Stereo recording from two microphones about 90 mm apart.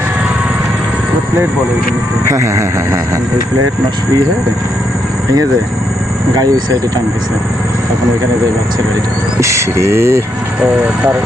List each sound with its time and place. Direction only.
2.2 s speech: 35° right (ahead or behind)
6.3 s speech: 45° right (ahead or behind)
9.4 s speech: 35° right (ahead or behind)